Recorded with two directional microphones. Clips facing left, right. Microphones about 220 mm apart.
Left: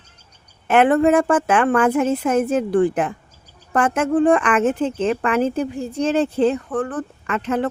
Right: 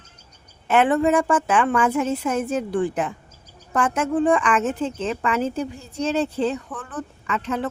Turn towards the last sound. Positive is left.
turn(degrees=55)  # may be behind; listen again after turning